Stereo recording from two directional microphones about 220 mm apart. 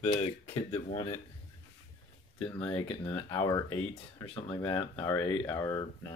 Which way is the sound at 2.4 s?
20° left (ahead or behind).